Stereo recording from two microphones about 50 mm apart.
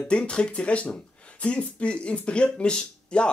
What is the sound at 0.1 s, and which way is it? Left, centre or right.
Speech, centre.